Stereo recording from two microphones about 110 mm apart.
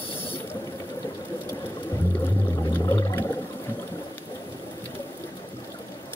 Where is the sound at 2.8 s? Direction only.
30° left (ahead or behind).